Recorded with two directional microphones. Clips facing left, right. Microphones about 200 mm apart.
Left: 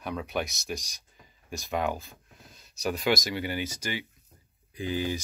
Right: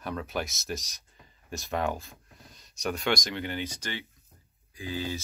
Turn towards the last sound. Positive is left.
turn(degrees=15)  # may be behind; listen again after turning